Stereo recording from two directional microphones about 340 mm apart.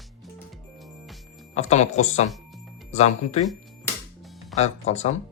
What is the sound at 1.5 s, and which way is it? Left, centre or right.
Speech, centre.